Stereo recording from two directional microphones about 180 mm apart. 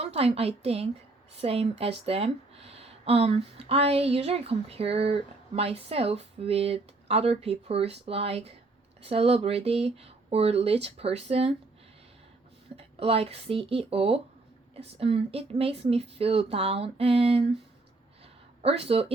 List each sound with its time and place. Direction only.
0.0 s speech: 35° right (ahead or behind)
12.7 s speech: 35° right (ahead or behind)
18.6 s speech: 35° right (ahead or behind)